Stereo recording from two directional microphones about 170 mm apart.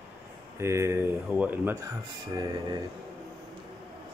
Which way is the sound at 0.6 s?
15° right (ahead or behind).